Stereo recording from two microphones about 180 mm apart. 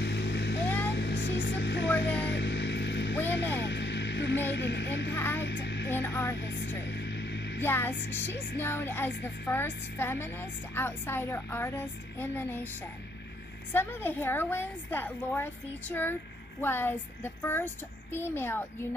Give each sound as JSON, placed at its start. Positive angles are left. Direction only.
{"t": 0.0, "sound": "vehicle", "side_deg": 70}
{"t": 0.7, "sound": "vehicle", "side_deg": 10}
{"t": 0.9, "sound": "a sound", "side_deg": 75}
{"t": 2.2, "sound": "vehicle", "side_deg": 75}
{"t": 3.6, "sound": "hum", "side_deg": 75}
{"t": 4.5, "sound": "speech", "side_deg": 75}
{"t": 5.1, "sound": "a woman's voice", "side_deg": 10}
{"t": 5.4, "sound": "a sound", "side_deg": 75}
{"t": 5.9, "sound": "a woman's voice", "side_deg": 10}
{"t": 6.3, "sound": "speech", "side_deg": 80}
{"t": 6.8, "sound": "a sound", "side_deg": 75}
{"t": 7.6, "sound": "a woman's voice", "side_deg": 10}